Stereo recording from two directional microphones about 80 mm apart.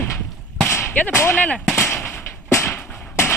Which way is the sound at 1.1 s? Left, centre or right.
Left.